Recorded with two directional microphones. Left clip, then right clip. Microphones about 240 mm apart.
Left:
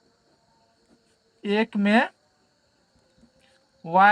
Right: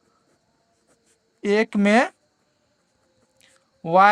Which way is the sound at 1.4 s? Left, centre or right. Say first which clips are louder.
Right 4 dB; right.